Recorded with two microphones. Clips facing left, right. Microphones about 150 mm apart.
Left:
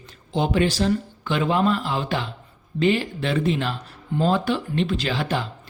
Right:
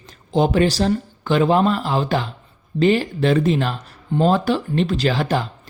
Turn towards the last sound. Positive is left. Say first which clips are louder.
# right 4 dB
turn(degrees=-40)  # may be behind; listen again after turning